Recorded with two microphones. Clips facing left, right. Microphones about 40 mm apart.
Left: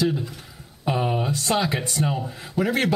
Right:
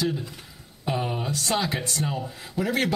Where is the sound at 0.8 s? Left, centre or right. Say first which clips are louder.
Left 4 dB; centre.